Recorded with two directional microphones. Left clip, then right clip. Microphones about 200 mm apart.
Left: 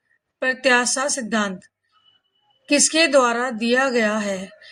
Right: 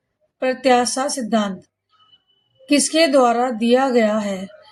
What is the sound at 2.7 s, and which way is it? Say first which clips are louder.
A woman's voice: right 1 dB; 35° left (ahead or behind).